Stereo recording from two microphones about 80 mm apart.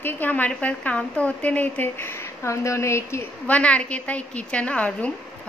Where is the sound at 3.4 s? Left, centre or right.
Centre.